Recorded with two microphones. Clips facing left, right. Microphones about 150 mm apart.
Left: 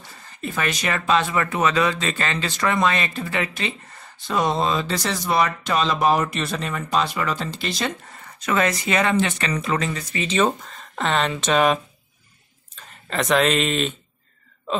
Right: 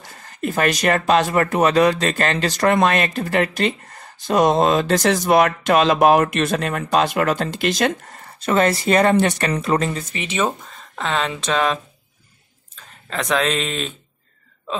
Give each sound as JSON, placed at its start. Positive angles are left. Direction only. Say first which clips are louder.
{"t": 0.4, "sound": "speech", "louder": "right 6 dB", "side_deg": -45}
{"t": 8.1, "sound": "speech", "louder": "right 4 dB", "side_deg": -35}
{"t": 10.2, "sound": "speech", "louder": "left 2 dB", "side_deg": -10}
{"t": 13.1, "sound": "speech", "louder": "left 1 dB", "side_deg": 0}